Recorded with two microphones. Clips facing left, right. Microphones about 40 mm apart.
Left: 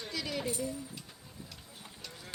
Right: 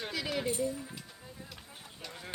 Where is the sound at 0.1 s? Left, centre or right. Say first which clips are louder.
Right 1 dB; centre.